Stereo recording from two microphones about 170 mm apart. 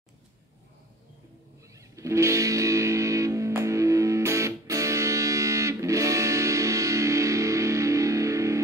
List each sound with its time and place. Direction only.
1.8 s music: 20° right (ahead or behind)